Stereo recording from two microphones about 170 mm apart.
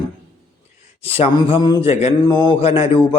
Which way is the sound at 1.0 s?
35° left (ahead or behind).